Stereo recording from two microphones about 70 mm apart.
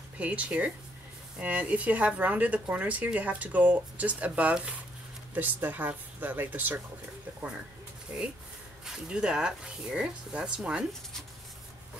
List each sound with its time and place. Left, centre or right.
0.2 s a woman's voice: centre
8.8 s speech: centre